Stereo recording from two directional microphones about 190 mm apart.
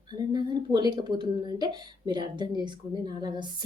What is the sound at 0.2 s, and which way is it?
A woman's voice, 20° right (ahead or behind).